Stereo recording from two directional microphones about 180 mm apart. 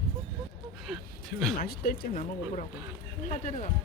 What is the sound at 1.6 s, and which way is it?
Speech, 60° left (ahead or behind).